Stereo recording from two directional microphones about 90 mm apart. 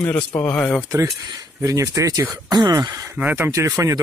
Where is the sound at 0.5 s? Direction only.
15° left (ahead or behind).